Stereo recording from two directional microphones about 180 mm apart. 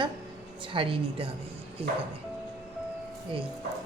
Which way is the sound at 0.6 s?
30° right (ahead or behind).